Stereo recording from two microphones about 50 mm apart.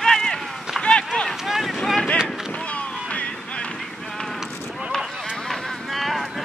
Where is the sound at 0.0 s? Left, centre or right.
Centre.